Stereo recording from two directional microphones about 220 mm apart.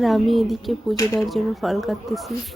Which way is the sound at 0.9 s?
15° left (ahead or behind).